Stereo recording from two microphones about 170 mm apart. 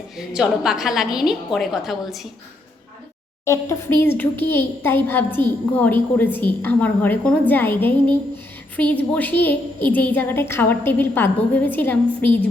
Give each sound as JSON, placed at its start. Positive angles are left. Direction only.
{"t": 0.2, "sound": "a woman's voice", "side_deg": -5}
{"t": 3.4, "sound": "a woman's voice", "side_deg": 15}